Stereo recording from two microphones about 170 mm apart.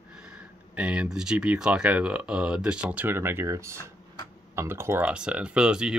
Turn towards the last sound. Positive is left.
turn(degrees=-5)  # may be behind; listen again after turning